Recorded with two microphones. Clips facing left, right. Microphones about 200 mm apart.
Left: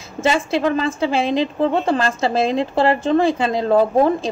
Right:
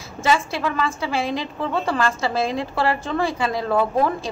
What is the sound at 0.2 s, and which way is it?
A woman's voice, 25° left (ahead or behind).